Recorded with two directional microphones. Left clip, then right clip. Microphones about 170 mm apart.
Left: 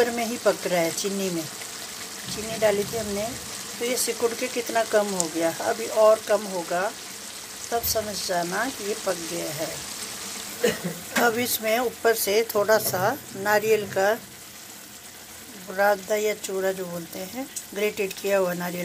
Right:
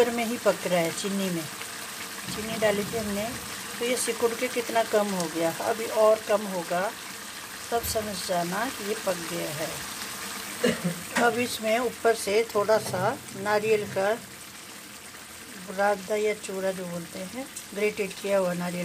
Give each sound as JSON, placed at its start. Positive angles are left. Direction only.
{"t": 0.0, "sound": "a woman's voice", "side_deg": -5}
{"t": 2.6, "sound": "a woman's voice", "side_deg": 0}
{"t": 11.2, "sound": "a woman's voice", "side_deg": 0}
{"t": 15.7, "sound": "a woman's voice", "side_deg": 0}
{"t": 17.7, "sound": "a woman's voice", "side_deg": 0}